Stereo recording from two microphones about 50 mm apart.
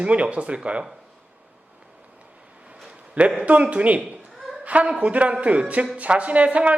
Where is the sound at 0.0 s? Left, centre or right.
Right.